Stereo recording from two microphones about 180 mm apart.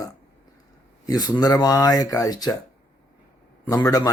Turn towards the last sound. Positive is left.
turn(degrees=20)  # may be behind; listen again after turning